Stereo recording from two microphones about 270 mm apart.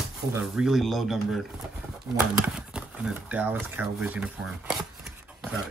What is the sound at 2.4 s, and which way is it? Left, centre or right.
Speech, centre.